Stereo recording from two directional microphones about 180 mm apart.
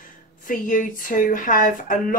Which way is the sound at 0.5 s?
45° left (ahead or behind).